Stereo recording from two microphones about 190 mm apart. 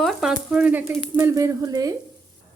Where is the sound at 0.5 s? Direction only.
5° right (ahead or behind).